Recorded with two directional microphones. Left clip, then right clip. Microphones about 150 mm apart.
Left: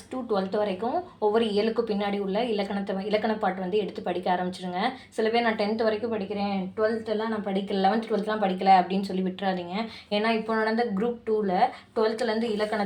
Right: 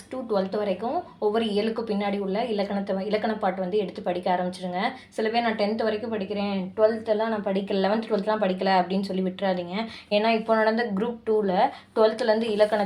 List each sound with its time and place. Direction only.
0.3 s speech: 10° right (ahead or behind)
7.4 s speech: 45° right (ahead or behind); by 9.8 s 10° right (ahead or behind)
10.1 s speech: 30° right (ahead or behind)